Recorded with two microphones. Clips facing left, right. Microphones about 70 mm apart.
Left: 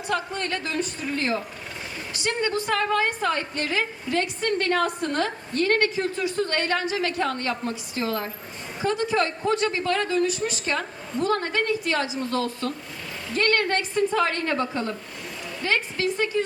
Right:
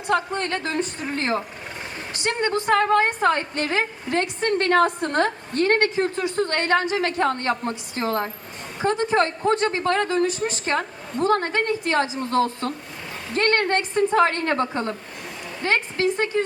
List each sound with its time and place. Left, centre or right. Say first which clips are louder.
0.1 s a woman's voice: right 5 dB; right